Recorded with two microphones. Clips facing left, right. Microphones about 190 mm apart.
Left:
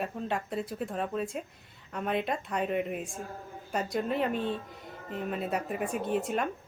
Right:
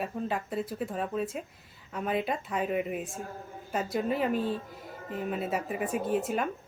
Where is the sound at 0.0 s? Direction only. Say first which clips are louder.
Right 1 dB; centre (ahead or behind).